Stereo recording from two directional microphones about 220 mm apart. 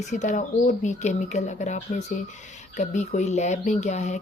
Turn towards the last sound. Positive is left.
turn(degrees=30)  # may be behind; listen again after turning